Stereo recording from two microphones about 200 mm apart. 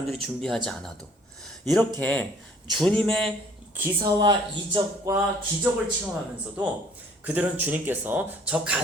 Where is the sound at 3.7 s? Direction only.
10° right (ahead or behind).